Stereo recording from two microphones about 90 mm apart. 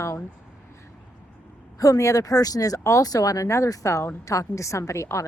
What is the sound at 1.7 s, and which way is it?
A woman's voice, 40° left (ahead or behind).